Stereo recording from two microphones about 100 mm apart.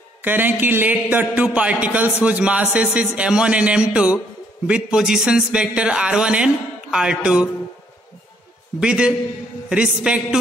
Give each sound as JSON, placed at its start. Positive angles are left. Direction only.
{"t": 0.2, "sound": "a man's voice", "side_deg": -20}
{"t": 8.7, "sound": "a man's voice", "side_deg": -10}